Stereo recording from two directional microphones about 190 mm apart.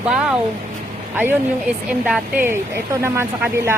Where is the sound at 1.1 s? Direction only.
10° right (ahead or behind).